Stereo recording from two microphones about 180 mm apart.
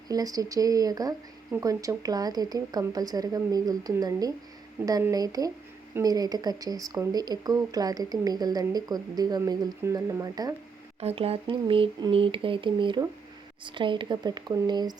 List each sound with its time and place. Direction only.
0.1 s speech: 20° right (ahead or behind)
11.0 s speech: 30° right (ahead or behind)